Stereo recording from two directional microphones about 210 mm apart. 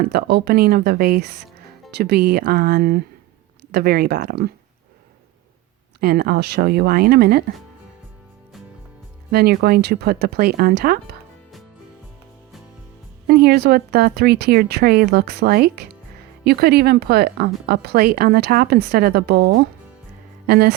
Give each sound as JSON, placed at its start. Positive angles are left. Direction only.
{"t": 0.0, "sound": "speech", "side_deg": -50}
{"t": 6.0, "sound": "speech", "side_deg": -45}
{"t": 9.3, "sound": "speech", "side_deg": -50}
{"t": 13.2, "sound": "speech", "side_deg": -45}